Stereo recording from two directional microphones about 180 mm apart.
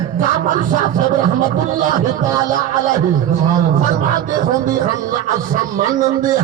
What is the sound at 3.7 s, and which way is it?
Speech, 45° right (ahead or behind).